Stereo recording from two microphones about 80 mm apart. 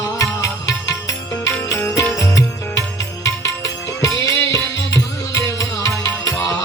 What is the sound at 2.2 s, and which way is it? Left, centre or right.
Music, left.